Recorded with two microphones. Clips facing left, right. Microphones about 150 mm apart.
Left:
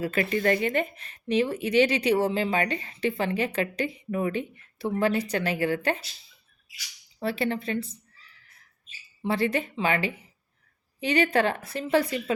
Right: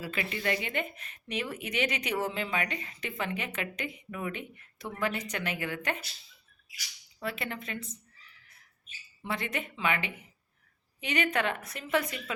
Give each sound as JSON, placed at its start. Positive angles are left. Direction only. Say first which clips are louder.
{"t": 0.0, "sound": "speech", "louder": "left 9 dB", "side_deg": 45}
{"t": 7.2, "sound": "speech", "louder": "left 9 dB", "side_deg": 30}
{"t": 9.2, "sound": "speech", "louder": "left 9 dB", "side_deg": 30}